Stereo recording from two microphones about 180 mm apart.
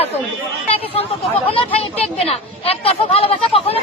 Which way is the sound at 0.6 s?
35° left (ahead or behind).